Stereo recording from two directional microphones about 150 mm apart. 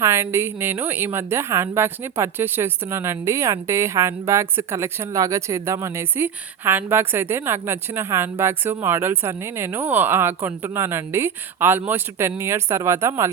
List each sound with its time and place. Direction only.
0.0 s a woman's voice: 15° right (ahead or behind)